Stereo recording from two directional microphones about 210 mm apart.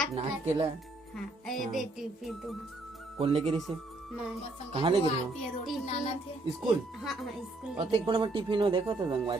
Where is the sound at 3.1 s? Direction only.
30° right (ahead or behind).